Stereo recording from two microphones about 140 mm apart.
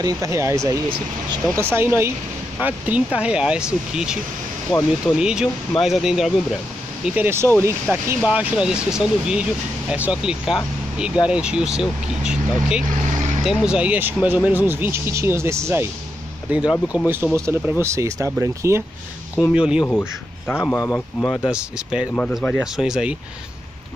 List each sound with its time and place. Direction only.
0.0 s speech: 20° right (ahead or behind); by 4.2 s 5° right (ahead or behind)
4.7 s speech: 30° left (ahead or behind)
5.0 s speech: 5° right (ahead or behind)
7.2 s speech: 15° right (ahead or behind)
8.3 s speech: 5° right (ahead or behind)
19.5 s speech: 5° right (ahead or behind)
19.9 s a man's voice: 15° left (ahead or behind)
21.5 s speech: 5° right (ahead or behind)